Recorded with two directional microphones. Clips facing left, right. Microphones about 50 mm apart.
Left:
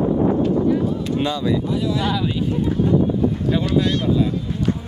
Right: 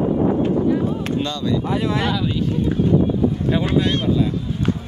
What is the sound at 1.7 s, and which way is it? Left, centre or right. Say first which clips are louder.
Speech: right 1 dB; right.